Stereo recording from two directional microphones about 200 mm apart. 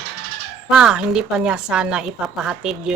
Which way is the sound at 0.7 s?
5° right (ahead or behind).